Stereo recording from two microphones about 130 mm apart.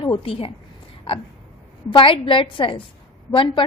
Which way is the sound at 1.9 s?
40° left (ahead or behind).